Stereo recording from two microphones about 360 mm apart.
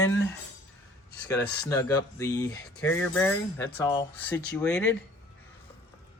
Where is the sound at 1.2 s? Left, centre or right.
Centre.